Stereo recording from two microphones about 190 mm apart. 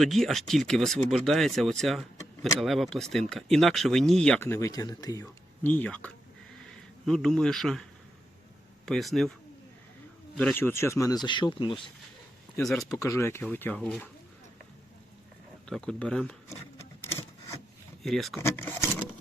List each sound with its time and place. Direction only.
0.0 s speech: centre (ahead or behind); by 5.2 s 20° left (ahead or behind)
5.2 s speech: 10° left (ahead or behind)
8.9 s speech: centre (ahead or behind)
10.3 s speech: 10° left (ahead or behind); by 11.8 s 25° left (ahead or behind)
13.0 s speech: 15° left (ahead or behind)
15.7 s speech: 5° left (ahead or behind)
17.0 s a sound: 15° left (ahead or behind)
18.0 s speech: centre (ahead or behind)
18.3 s speech: 10° left (ahead or behind)